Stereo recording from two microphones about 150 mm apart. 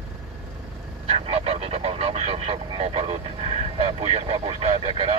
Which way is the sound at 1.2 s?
45° right (ahead or behind).